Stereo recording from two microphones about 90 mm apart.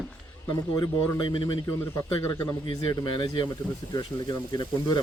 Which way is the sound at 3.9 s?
50° left (ahead or behind).